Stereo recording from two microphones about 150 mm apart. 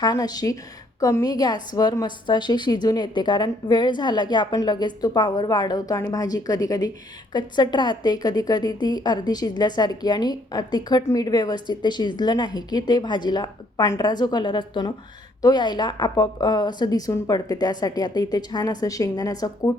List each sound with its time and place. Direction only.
0.0 s speech: 25° left (ahead or behind)